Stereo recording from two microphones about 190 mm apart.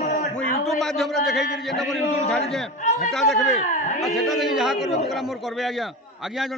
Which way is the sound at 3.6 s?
40° left (ahead or behind).